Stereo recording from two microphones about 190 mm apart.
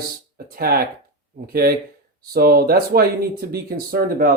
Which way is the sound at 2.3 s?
50° right (ahead or behind).